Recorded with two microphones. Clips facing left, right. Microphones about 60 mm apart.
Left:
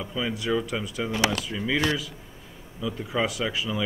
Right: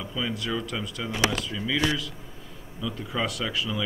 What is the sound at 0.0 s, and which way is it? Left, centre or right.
Speech, centre.